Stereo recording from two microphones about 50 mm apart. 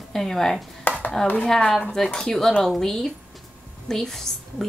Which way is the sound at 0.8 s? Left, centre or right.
Left.